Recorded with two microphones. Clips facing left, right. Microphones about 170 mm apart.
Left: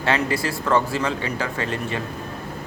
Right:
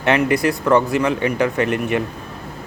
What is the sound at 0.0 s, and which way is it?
Speech, 20° right (ahead or behind).